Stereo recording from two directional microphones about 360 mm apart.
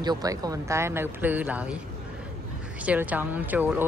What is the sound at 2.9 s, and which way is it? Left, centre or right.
Speech, centre.